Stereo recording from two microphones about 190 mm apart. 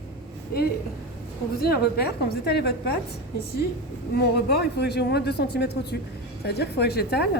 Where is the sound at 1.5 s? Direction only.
55° left (ahead or behind).